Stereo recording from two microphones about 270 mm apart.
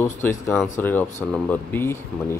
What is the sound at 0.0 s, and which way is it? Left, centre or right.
Speech, centre.